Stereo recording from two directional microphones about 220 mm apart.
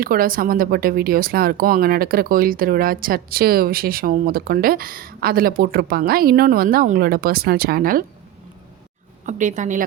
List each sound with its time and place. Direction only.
0.0 s speech: 40° right (ahead or behind)
9.2 s a woman's voice: 35° right (ahead or behind)